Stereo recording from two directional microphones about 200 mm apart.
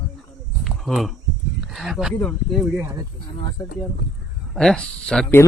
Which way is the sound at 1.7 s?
Centre (ahead or behind).